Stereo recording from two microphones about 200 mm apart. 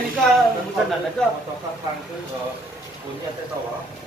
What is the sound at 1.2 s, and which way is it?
Speech, 5° left (ahead or behind).